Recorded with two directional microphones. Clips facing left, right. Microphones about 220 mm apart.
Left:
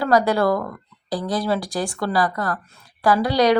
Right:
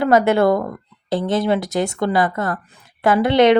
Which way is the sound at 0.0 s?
25° right (ahead or behind).